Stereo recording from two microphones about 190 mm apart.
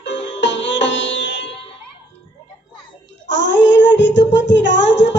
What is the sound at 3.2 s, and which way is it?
Child singing, 65° left (ahead or behind).